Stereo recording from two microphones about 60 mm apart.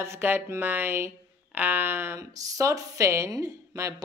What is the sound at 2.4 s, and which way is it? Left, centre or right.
Speech, right.